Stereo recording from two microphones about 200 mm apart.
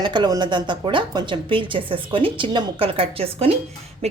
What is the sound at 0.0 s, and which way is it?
A woman's voice, 20° right (ahead or behind).